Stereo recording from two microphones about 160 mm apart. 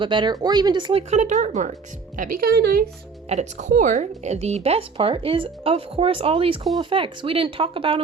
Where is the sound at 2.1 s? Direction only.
60° right (ahead or behind); by 2.9 s 80° right.